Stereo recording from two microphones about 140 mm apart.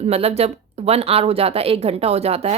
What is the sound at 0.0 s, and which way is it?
A woman's voice, 45° right (ahead or behind).